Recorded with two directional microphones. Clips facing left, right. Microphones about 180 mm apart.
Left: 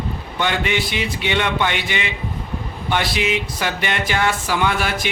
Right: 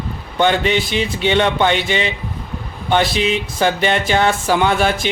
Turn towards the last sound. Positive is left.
turn(degrees=-30)  # may be behind; listen again after turning